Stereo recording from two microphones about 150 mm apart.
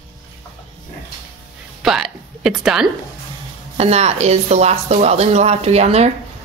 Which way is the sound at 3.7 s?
45° right (ahead or behind).